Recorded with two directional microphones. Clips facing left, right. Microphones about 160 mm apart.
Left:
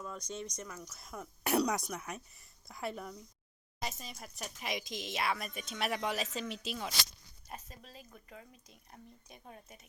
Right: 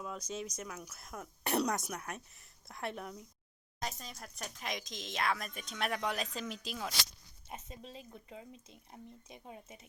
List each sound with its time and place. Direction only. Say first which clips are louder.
0.0 s speech: right 1 dB; 5° right (ahead or behind)
7.5 s speech: right 2 dB; 25° right (ahead or behind)